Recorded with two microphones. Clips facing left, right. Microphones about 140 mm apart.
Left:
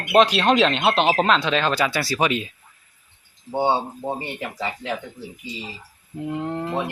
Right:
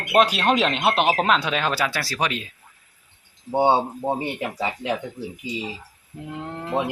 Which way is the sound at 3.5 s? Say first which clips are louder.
Right 2 dB; 15° right (ahead or behind).